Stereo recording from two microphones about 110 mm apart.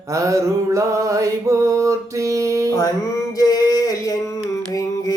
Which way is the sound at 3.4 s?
35° left (ahead or behind).